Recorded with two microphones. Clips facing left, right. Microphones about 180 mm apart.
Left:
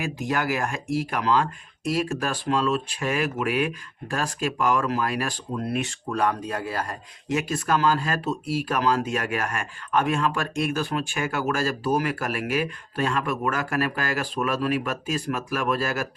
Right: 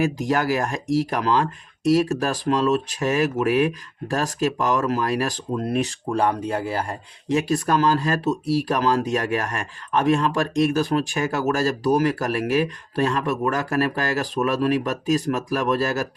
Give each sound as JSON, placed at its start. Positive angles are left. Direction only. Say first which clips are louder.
{"t": 0.0, "sound": "speech", "louder": "right 5 dB", "side_deg": -40}